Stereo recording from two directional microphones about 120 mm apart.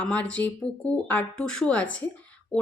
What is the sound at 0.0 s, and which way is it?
A woman's voice, 10° left (ahead or behind).